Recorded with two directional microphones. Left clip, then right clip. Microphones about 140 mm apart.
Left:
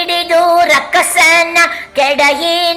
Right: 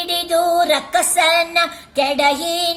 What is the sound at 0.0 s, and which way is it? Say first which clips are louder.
Music: left 7 dB; 40° right (ahead or behind).